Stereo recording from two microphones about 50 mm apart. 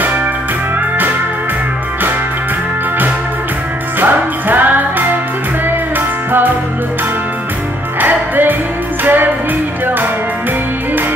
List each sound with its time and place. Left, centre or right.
4.0 s music: right
8.0 s music: right